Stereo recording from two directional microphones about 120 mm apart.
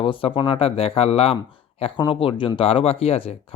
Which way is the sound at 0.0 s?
45° left (ahead or behind).